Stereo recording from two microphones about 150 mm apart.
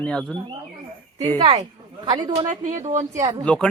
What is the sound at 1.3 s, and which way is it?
Speech, 45° right (ahead or behind).